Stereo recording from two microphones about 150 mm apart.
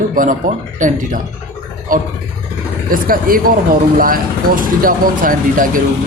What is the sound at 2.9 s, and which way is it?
Speech, 70° right (ahead or behind).